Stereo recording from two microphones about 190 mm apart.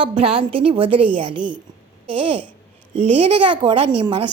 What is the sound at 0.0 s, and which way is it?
A woman's voice, 30° right (ahead or behind).